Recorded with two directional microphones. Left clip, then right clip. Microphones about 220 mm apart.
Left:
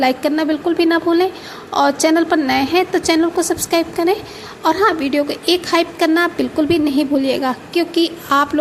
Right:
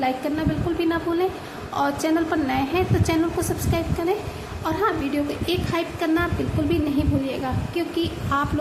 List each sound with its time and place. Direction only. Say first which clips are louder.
0.0 s a woman's voice: left 8 dB; 35° left (ahead or behind)